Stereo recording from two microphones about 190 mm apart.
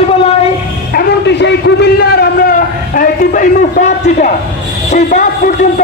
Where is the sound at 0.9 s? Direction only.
65° left (ahead or behind); by 4.3 s 40° left (ahead or behind).